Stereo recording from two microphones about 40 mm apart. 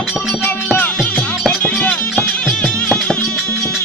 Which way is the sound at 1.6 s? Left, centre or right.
Left.